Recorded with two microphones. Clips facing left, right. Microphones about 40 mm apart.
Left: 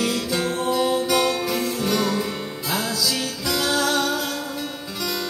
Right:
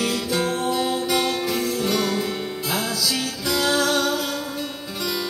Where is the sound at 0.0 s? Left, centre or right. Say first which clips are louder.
Even; centre.